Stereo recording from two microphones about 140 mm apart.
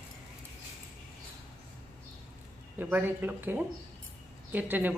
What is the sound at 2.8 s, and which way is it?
Speech, 15° right (ahead or behind).